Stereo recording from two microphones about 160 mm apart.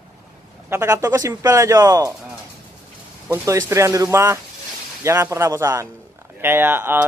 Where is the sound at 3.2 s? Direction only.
15° right (ahead or behind).